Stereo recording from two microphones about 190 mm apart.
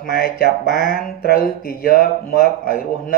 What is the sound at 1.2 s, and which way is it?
A man's voice, 50° left (ahead or behind).